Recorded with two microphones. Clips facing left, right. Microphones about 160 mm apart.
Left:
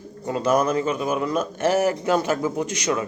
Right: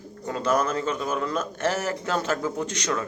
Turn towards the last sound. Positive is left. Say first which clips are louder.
# left 4 dB
turn(degrees=10)  # may be behind; listen again after turning